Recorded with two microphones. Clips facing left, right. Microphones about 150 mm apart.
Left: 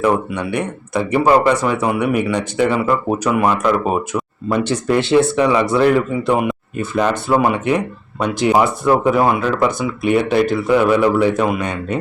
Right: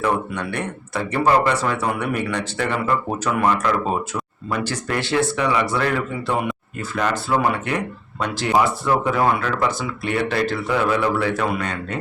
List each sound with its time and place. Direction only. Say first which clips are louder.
0.0 s speech: left 5 dB; 15° left (ahead or behind)